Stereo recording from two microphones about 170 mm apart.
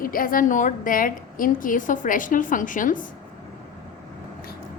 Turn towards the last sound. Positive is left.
turn(degrees=50)  # may be behind; listen again after turning